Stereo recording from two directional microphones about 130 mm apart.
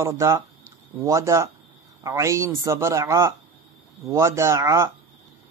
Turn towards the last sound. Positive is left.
turn(degrees=-20)  # may be behind; listen again after turning